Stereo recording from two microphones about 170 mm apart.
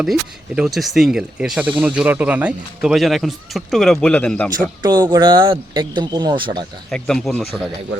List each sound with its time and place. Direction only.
0.0 s speech: 5° right (ahead or behind)
4.8 s speech: 25° right (ahead or behind)
6.9 s speech: 5° left (ahead or behind)